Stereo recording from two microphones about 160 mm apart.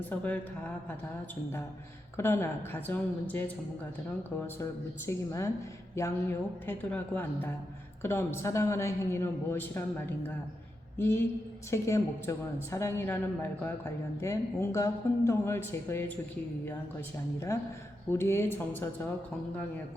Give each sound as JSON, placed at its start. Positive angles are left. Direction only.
{"t": 0.0, "sound": "speech", "side_deg": 10}
{"t": 2.1, "sound": "speech", "side_deg": 15}
{"t": 5.0, "sound": "a woman's voice", "side_deg": 20}
{"t": 10.9, "sound": "a woman's voice", "side_deg": 15}
{"t": 18.1, "sound": "speech", "side_deg": 15}